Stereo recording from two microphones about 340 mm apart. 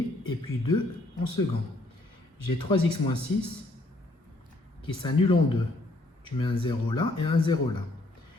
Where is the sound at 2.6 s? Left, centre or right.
Centre.